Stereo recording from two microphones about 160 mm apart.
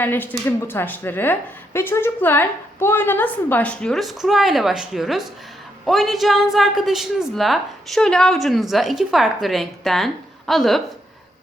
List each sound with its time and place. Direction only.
0.0 s a woman's voice: 10° left (ahead or behind)